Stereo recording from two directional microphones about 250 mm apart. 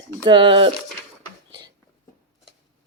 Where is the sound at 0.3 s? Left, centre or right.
Centre.